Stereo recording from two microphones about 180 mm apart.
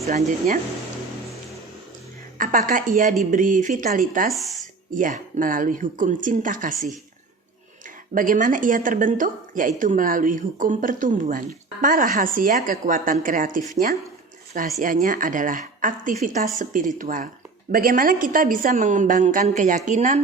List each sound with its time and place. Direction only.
0.1 s a woman's voice: 50° right (ahead or behind)
2.4 s a woman's voice: 50° right (ahead or behind)
8.1 s a woman's voice: 50° right (ahead or behind)
14.8 s a woman's voice: 50° right (ahead or behind)